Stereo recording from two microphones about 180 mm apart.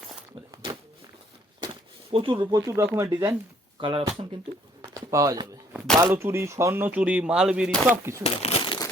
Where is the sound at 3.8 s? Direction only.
30° right (ahead or behind).